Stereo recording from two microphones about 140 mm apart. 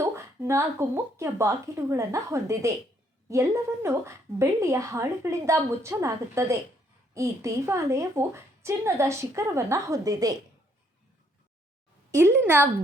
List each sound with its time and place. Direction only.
0.0 s a woman's voice: 20° right (ahead or behind)
12.1 s speech: 20° right (ahead or behind)